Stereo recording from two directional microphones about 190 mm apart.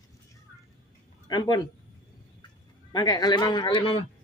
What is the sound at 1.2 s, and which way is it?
Speech, 20° left (ahead or behind).